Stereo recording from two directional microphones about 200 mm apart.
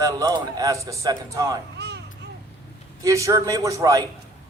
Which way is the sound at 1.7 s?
55° right (ahead or behind).